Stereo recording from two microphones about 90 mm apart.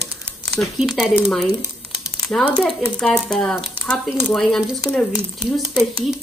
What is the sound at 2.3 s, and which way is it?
Speech, 20° left (ahead or behind).